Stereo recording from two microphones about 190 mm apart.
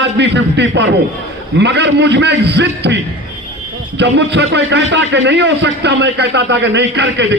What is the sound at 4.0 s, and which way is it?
A man's voice, 65° right (ahead or behind).